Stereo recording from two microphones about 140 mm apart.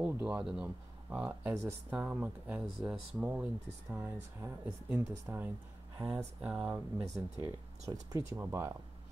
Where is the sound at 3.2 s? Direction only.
10° right (ahead or behind).